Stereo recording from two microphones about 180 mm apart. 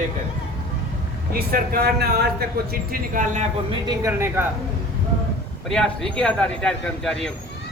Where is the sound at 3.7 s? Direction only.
20° right (ahead or behind).